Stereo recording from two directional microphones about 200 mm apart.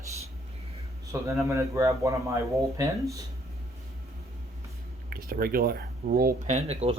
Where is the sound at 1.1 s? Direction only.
15° right (ahead or behind).